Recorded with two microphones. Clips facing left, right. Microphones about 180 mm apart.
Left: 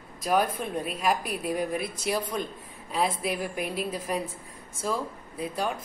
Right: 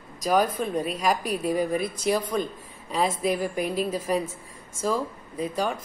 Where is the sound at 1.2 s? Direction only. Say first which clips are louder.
Right 5 dB; 45° right (ahead or behind).